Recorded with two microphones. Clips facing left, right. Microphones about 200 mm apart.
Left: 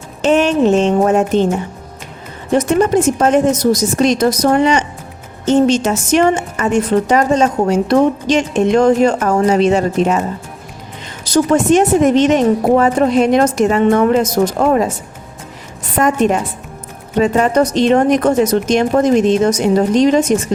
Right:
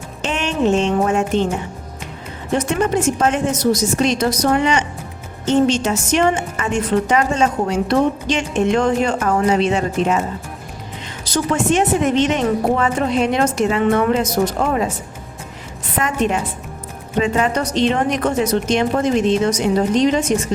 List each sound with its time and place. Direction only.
0.2 s a woman's voice: 45° left (ahead or behind)
2.6 s a woman's voice: 40° left (ahead or behind)
11.5 s a woman's voice: 40° left (ahead or behind)
16.0 s a woman's voice: 45° left (ahead or behind)